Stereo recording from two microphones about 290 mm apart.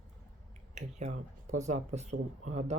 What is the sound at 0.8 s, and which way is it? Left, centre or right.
Speech, right.